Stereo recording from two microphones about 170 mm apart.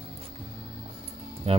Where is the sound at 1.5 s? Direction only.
35° right (ahead or behind).